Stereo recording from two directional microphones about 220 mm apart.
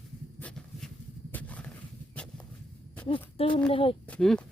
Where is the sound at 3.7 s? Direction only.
25° left (ahead or behind).